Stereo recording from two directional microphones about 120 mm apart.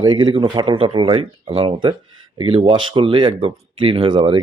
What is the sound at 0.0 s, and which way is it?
Speech, 40° right (ahead or behind).